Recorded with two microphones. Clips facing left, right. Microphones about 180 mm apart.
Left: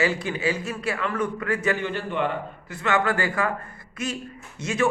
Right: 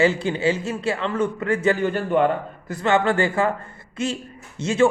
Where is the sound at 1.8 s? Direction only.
45° right (ahead or behind).